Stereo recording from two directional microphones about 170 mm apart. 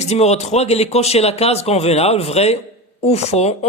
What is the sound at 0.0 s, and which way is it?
Speech, 40° left (ahead or behind).